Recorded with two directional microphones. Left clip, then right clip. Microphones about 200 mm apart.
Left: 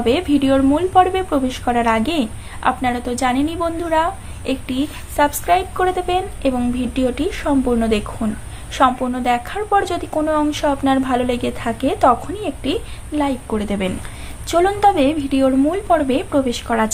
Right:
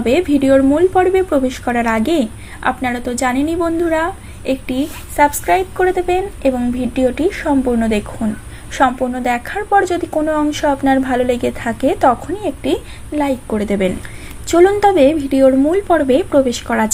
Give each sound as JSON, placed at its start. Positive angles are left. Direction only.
{"t": 0.0, "sound": "a woman's voice", "side_deg": -10}